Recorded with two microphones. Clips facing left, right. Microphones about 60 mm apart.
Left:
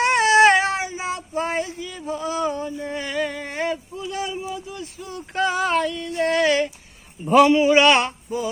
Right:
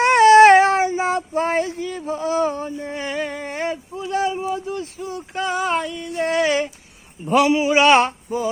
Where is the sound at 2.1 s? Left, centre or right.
Right.